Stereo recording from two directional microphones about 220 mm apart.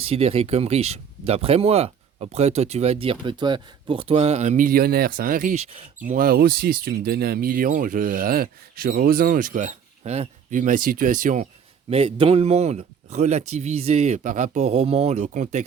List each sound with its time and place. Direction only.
0.0 s speech: 25° right (ahead or behind)
6.1 s speech: 40° right (ahead or behind)
11.9 s speech: 25° right (ahead or behind)